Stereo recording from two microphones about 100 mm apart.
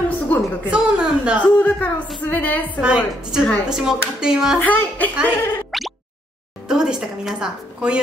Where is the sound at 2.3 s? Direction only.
15° left (ahead or behind).